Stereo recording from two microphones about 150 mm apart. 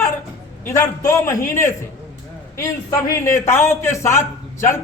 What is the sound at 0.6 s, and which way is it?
Speech, 15° left (ahead or behind).